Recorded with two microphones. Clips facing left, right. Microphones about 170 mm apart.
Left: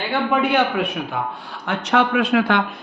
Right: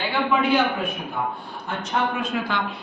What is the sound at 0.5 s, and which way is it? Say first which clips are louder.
A man's voice: left 2 dB; 80° left.